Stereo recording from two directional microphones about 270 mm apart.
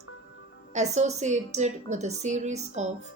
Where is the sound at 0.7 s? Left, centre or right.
Right.